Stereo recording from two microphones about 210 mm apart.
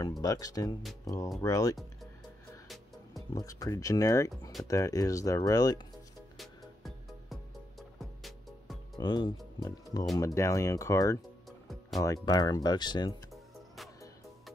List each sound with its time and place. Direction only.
0.2 s speech: 15° left (ahead or behind)
3.3 s speech: 15° left (ahead or behind)
6.3 s music: centre (ahead or behind)
8.9 s speech: 20° left (ahead or behind)
11.4 s music: centre (ahead or behind)
12.0 s speech: 15° left (ahead or behind)